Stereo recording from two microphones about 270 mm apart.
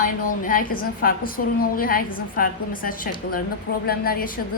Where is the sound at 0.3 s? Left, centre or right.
Left.